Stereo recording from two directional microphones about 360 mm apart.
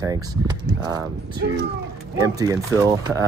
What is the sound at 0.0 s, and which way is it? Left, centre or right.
Speech, centre.